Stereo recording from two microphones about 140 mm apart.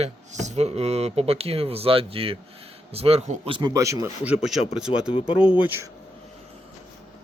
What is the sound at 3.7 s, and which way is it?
Speech, 25° right (ahead or behind).